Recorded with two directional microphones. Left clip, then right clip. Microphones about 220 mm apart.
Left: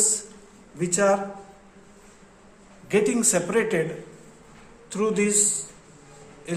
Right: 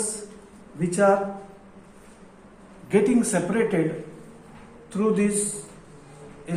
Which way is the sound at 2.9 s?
50° left (ahead or behind).